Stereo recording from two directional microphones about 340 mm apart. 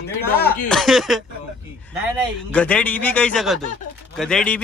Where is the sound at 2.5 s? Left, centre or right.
Centre.